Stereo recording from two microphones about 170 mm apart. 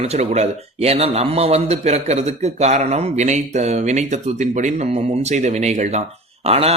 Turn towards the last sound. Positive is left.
turn(degrees=-35)  # may be behind; listen again after turning